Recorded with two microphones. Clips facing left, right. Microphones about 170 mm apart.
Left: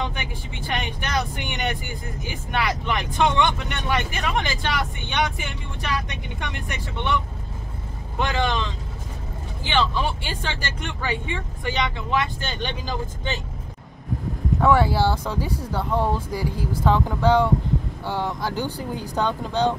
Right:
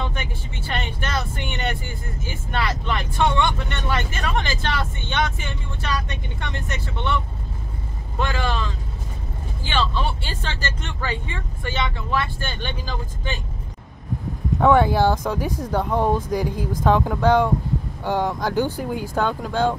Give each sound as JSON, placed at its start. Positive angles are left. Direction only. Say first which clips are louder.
{"t": 0.0, "sound": "speech", "louder": "even", "side_deg": 15}
{"t": 8.2, "sound": "speech", "louder": "left 1 dB", "side_deg": 20}
{"t": 14.6, "sound": "speech", "louder": "right 3 dB", "side_deg": -20}